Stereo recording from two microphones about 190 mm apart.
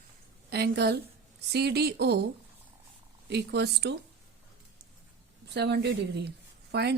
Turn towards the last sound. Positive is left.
turn(degrees=-60)  # may be behind; listen again after turning